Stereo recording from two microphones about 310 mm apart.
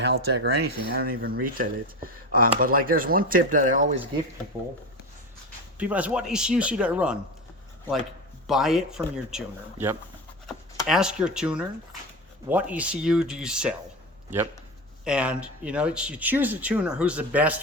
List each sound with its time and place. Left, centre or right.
0.0 s speech: right
5.7 s speech: centre
8.4 s speech: centre
15.0 s speech: centre